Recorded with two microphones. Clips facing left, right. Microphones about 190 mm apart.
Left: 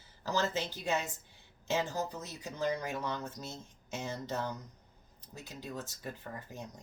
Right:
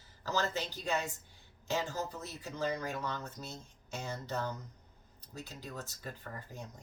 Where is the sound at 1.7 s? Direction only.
15° left (ahead or behind).